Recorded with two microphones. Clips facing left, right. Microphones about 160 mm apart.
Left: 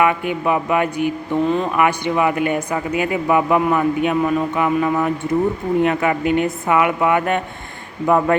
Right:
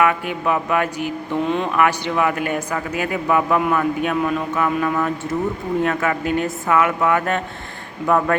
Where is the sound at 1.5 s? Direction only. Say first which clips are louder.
Even; 5° left (ahead or behind).